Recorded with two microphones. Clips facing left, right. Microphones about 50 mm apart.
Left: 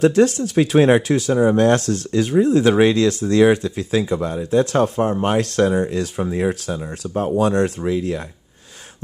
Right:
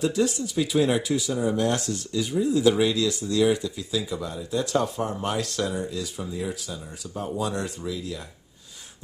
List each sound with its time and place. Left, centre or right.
0.0 s speech: left